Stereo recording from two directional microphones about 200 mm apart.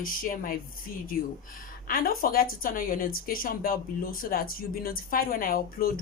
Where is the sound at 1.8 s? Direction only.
45° left (ahead or behind).